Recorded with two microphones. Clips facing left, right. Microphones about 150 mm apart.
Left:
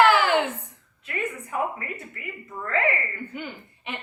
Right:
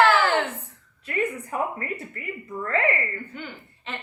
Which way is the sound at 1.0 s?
35° right (ahead or behind).